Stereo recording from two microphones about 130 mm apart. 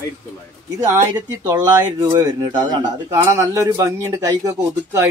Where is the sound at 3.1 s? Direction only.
20° right (ahead or behind).